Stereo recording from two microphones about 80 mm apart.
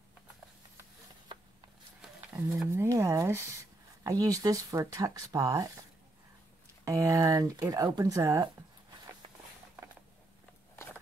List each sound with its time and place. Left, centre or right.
2.7 s a sound: right
4.0 s speech: right
6.8 s speech: right